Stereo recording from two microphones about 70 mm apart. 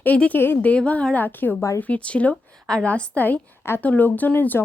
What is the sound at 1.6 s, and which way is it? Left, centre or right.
Speech, left.